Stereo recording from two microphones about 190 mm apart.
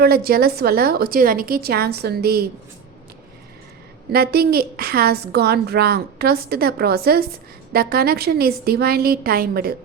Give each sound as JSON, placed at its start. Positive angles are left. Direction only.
{"t": 0.0, "sound": "a woman's voice", "side_deg": -55}
{"t": 4.1, "sound": "a woman's voice", "side_deg": -55}